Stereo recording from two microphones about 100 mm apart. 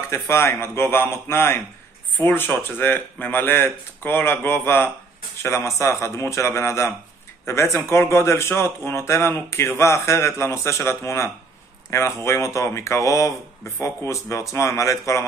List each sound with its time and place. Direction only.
0.1 s a man's voice: 25° left (ahead or behind)